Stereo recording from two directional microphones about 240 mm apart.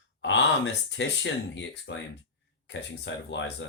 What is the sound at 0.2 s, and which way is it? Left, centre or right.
Speech, left.